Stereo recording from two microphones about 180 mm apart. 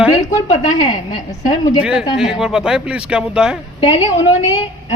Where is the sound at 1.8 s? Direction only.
5° right (ahead or behind).